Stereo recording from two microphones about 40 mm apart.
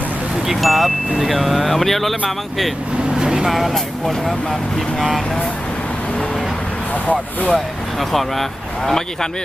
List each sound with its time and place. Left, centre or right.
0.4 s speech: centre
3.2 s vehicle: right
3.4 s speech: centre
6.9 s speech: left
7.5 s speech: centre